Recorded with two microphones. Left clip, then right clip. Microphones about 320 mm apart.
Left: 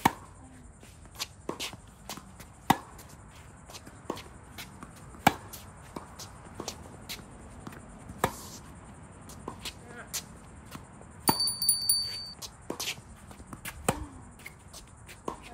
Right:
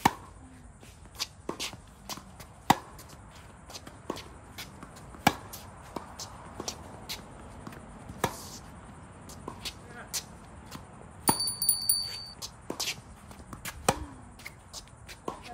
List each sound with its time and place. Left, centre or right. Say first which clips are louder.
1.1 s shuffling cards: right 1 dB; centre
2.7 s chop: right 2 dB; centre
4.1 s chopping: even; centre
6.0 s shuffle: right 3 dB; right
7.1 s a sound: right 1 dB; centre
9.3 s music: right 1 dB; centre
11.2 s a sound: left 1 dB; centre
15.0 s shuffle: even; centre